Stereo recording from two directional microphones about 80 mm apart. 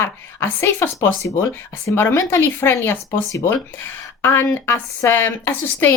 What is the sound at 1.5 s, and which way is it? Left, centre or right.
A woman's voice, left.